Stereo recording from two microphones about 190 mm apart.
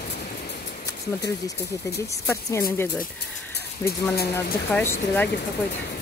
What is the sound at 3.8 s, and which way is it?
Speech, 15° left (ahead or behind).